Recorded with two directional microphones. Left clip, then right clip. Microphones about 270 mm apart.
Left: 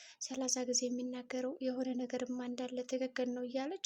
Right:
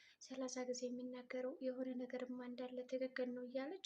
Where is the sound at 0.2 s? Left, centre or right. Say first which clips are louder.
Left 9 dB; left.